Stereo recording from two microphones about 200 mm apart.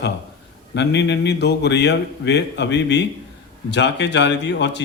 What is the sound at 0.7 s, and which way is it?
A man's voice, 60° left (ahead or behind).